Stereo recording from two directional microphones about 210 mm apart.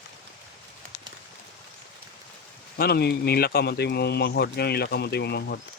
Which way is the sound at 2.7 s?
50° left (ahead or behind).